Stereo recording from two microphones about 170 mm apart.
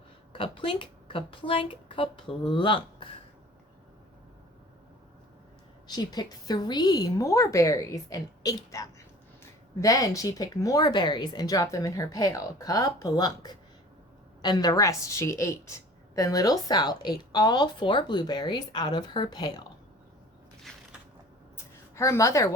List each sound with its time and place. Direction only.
0.3 s speech: 30° left (ahead or behind)
5.9 s a woman's voice: 25° left (ahead or behind)
21.9 s a woman's voice: 15° left (ahead or behind)